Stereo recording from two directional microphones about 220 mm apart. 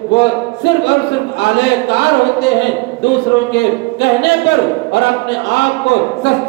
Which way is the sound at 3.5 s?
50° left (ahead or behind).